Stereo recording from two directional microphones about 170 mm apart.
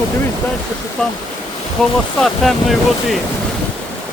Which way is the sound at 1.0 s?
5° left (ahead or behind).